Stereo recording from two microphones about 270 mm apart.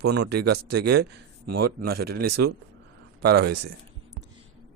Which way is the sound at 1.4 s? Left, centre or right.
Right.